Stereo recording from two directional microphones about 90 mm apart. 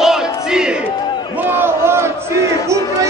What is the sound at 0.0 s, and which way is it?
Music, 5° right (ahead or behind).